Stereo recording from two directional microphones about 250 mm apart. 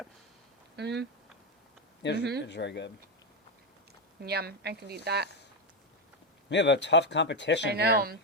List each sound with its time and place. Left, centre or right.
0.8 s speech: right
2.0 s speech: left
4.2 s a woman's voice: right
6.5 s speech: left
7.7 s a woman's voice: right